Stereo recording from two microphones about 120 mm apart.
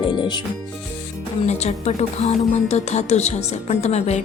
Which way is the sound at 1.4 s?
65° left (ahead or behind).